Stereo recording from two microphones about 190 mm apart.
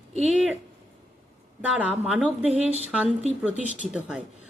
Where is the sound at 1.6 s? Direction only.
5° right (ahead or behind).